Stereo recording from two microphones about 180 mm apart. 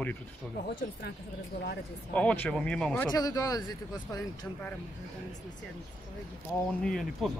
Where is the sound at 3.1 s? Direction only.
20° left (ahead or behind).